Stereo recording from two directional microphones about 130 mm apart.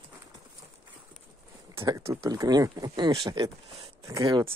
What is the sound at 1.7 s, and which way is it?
Speech, 25° right (ahead or behind).